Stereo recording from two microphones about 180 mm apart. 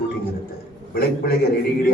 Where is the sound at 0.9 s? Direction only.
60° left (ahead or behind).